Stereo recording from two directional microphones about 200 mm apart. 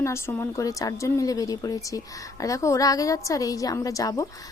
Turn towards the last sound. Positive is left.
turn(degrees=15)  # may be behind; listen again after turning